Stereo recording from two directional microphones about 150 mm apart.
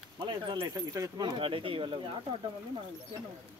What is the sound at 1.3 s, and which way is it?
Speech, 35° right (ahead or behind).